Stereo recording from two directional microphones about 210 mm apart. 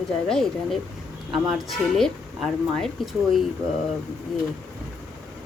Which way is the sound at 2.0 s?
Centre (ahead or behind).